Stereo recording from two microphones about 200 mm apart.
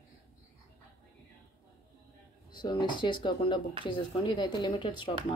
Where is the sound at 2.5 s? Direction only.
20° left (ahead or behind).